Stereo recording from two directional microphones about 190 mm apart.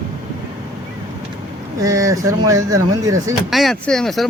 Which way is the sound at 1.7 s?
15° right (ahead or behind).